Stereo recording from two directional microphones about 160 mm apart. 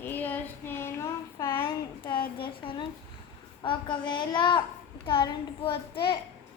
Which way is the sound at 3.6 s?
30° left (ahead or behind).